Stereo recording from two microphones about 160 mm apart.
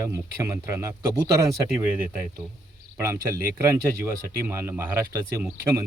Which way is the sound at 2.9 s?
15° right (ahead or behind).